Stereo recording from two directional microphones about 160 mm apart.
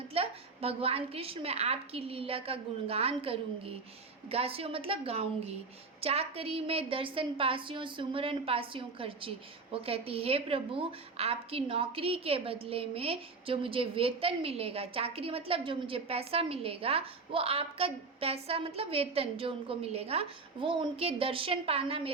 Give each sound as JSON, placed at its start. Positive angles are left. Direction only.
{"t": 0.1, "sound": "a woman's voice", "side_deg": -40}